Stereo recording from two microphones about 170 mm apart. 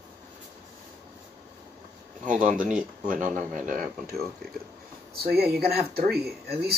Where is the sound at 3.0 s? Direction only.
50° right (ahead or behind).